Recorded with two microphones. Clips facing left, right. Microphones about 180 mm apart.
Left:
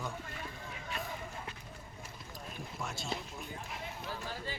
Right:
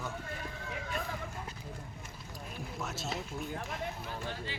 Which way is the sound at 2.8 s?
Centre (ahead or behind).